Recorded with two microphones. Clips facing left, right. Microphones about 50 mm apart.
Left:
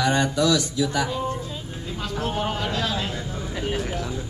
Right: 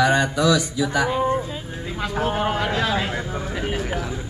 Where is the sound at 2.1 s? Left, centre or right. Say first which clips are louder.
Right 4 dB; right.